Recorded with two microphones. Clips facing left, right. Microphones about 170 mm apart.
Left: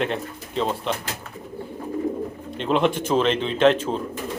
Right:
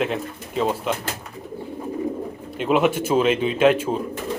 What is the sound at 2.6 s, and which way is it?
Speech, 5° right (ahead or behind).